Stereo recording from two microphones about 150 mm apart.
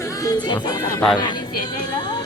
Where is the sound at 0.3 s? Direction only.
30° left (ahead or behind).